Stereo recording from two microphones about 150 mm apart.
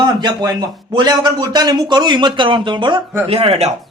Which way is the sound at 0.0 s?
25° right (ahead or behind).